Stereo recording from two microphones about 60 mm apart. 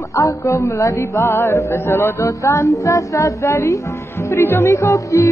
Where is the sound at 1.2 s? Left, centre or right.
Left.